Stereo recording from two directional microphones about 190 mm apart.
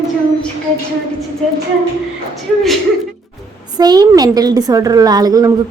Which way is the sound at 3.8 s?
20° right (ahead or behind).